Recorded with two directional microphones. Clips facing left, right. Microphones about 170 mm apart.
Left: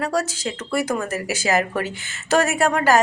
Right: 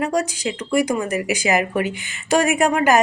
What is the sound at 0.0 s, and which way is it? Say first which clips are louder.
A woman's voice: right 2 dB; 15° right (ahead or behind).